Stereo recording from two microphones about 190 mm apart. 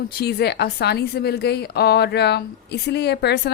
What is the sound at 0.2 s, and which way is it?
A woman's voice, 60° left (ahead or behind).